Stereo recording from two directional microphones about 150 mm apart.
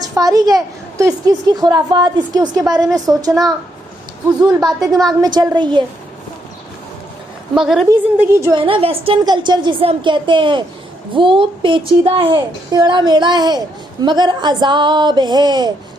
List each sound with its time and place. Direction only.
0.2 s a woman's voice: 25° right (ahead or behind)
7.5 s a woman's voice: centre (ahead or behind)
8.2 s a woman's voice: 20° right (ahead or behind)
8.5 s a woman's voice: 35° right (ahead or behind)